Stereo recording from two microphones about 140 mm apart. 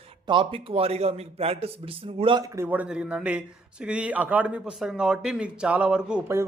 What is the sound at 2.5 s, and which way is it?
A man's voice, 15° right (ahead or behind).